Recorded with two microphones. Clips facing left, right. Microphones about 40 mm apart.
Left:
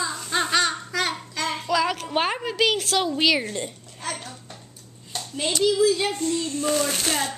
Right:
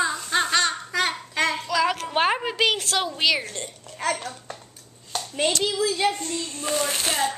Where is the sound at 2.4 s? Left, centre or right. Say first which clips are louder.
Even; centre.